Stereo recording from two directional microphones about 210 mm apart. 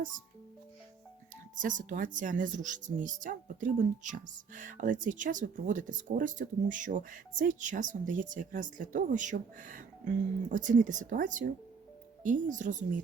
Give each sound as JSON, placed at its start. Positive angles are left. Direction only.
{"t": 1.6, "sound": "speech", "side_deg": -40}